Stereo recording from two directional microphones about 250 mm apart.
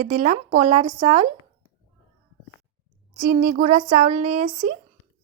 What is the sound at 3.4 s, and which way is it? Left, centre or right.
Speech, right.